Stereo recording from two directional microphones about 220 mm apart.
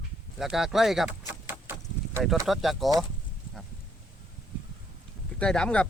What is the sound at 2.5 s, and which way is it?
Speech, centre (ahead or behind).